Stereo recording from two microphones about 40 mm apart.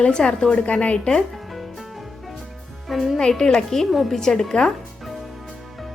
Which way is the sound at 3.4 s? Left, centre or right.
Centre.